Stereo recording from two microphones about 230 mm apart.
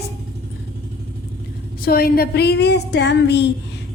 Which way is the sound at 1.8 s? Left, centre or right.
Left.